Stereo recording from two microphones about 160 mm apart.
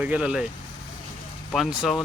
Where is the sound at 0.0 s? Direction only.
10° right (ahead or behind).